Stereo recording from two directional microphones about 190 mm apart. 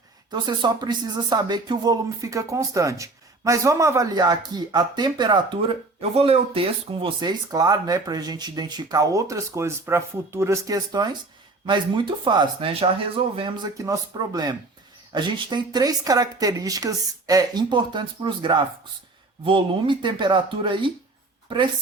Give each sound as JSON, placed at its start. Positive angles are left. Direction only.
{"t": 0.3, "sound": "speech", "side_deg": -20}